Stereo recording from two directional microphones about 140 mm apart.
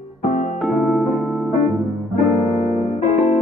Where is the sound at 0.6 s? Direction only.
Centre (ahead or behind).